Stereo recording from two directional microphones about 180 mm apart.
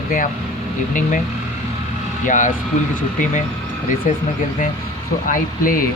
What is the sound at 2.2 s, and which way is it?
Speech, 45° left (ahead or behind).